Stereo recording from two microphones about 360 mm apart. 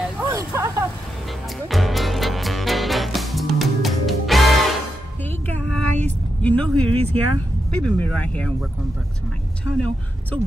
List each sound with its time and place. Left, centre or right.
0.0 s snake: centre
1.7 s music: centre
5.2 s vehicle: centre
7.0 s speech: right
7.8 s speech: centre
9.8 s speech: centre